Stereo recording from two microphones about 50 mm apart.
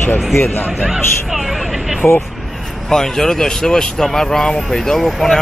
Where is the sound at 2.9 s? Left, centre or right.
Centre.